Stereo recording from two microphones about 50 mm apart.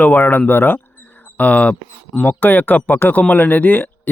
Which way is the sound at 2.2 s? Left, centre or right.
Left.